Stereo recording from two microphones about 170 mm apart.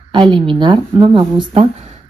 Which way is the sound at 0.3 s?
30° right (ahead or behind).